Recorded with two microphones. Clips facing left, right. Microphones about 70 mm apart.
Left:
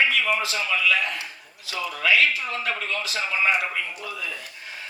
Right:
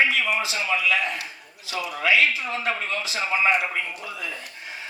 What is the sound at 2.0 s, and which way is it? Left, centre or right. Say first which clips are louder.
A man's voice: even; right.